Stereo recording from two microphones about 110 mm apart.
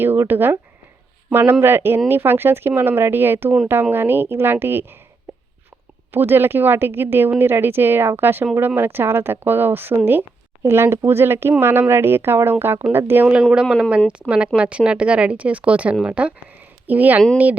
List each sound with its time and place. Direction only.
0.0 s a woman's voice: 20° right (ahead or behind)
6.1 s a woman's voice: 20° right (ahead or behind)
13.4 s speech: 5° right (ahead or behind)